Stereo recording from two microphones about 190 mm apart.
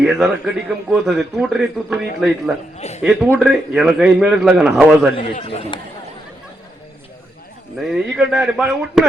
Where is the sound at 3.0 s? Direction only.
5° right (ahead or behind).